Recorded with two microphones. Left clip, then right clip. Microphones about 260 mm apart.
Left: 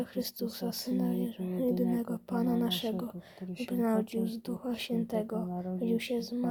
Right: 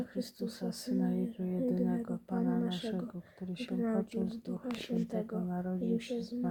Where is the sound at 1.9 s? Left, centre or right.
Left.